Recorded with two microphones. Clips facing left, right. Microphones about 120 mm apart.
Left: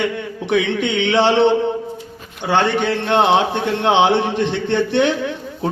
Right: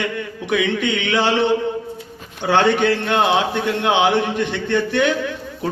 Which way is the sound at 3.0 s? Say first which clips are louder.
Left 3 dB; 25° left (ahead or behind).